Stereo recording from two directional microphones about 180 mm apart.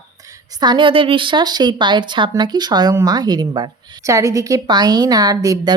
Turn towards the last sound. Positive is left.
turn(degrees=-20)  # may be behind; listen again after turning